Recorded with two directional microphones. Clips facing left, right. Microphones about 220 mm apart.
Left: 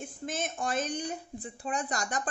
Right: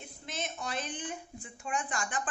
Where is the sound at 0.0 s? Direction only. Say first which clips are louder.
Left 5 dB; 50° left (ahead or behind).